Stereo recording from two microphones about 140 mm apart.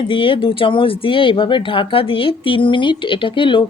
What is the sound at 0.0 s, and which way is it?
Speech, 40° left (ahead or behind).